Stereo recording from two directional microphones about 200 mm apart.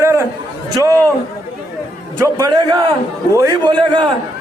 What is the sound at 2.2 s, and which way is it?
A man's voice, 15° right (ahead or behind).